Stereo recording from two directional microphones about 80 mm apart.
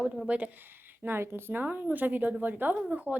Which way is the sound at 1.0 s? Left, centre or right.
Right.